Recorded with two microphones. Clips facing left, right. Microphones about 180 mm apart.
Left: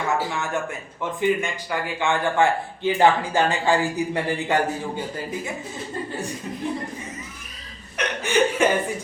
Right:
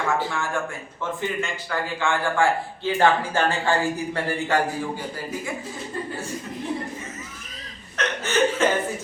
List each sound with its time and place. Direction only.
0.3 s a man's voice: 20° left (ahead or behind)
7.9 s chuckle: 15° left (ahead or behind)